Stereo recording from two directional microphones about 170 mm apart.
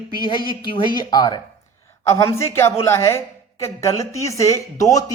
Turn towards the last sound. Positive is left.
turn(degrees=20)  # may be behind; listen again after turning